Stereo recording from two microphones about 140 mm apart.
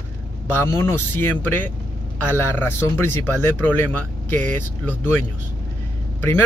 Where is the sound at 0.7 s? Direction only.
15° left (ahead or behind).